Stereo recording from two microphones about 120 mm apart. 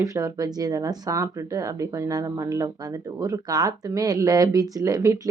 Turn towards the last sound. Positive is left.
turn(degrees=-25)  # may be behind; listen again after turning